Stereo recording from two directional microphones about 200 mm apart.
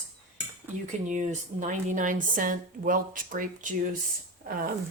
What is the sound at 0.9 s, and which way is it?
Speech, 40° right (ahead or behind).